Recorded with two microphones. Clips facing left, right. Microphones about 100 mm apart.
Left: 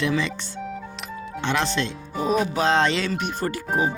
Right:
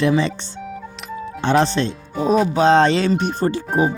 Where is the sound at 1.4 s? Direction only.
35° right (ahead or behind).